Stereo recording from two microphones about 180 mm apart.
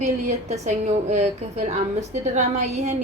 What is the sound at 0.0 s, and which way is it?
A woman's voice, 40° right (ahead or behind).